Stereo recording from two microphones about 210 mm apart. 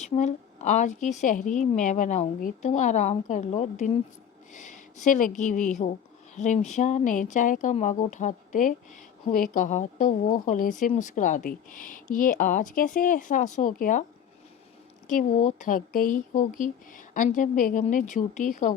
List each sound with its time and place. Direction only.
0.0 s speech: 35° left (ahead or behind)
15.0 s speech: 35° left (ahead or behind)